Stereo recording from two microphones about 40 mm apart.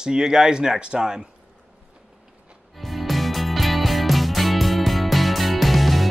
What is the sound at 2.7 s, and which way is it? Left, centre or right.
Music, centre.